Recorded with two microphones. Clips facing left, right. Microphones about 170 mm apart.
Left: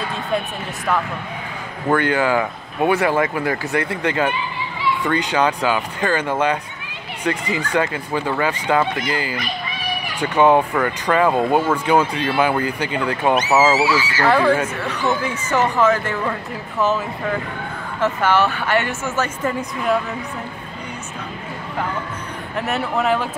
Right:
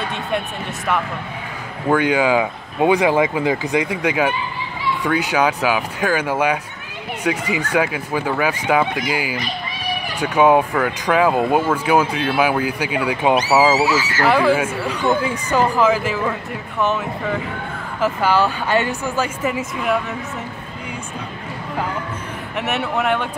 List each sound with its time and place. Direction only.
1.9 s speech: 15° right (ahead or behind)
13.7 s speech: 45° right (ahead or behind)
14.2 s speech: 5° right (ahead or behind)
18.0 s speech: 10° right (ahead or behind)
22.6 s speech: centre (ahead or behind)